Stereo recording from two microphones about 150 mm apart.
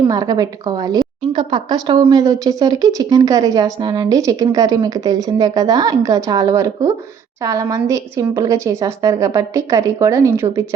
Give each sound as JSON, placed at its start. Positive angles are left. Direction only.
{"t": 0.0, "sound": "speech", "side_deg": -25}